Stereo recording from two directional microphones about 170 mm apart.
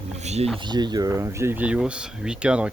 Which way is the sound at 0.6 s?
25° right (ahead or behind).